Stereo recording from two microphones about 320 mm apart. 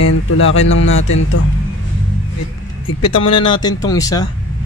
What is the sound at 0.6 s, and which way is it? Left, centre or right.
Speech, left.